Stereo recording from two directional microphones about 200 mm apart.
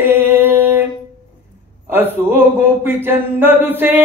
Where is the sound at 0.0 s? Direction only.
10° right (ahead or behind).